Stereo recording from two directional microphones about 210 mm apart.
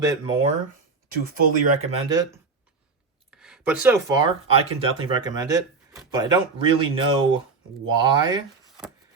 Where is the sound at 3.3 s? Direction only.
5° right (ahead or behind).